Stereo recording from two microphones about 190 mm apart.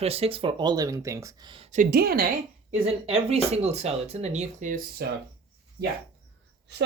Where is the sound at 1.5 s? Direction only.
35° right (ahead or behind).